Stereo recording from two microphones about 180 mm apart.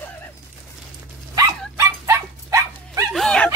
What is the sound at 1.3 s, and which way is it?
Dog, 20° right (ahead or behind).